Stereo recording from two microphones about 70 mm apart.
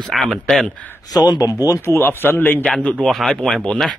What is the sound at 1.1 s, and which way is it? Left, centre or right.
Speech, left.